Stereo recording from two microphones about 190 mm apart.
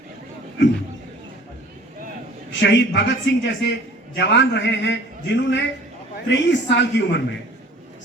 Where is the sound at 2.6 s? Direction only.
70° left (ahead or behind).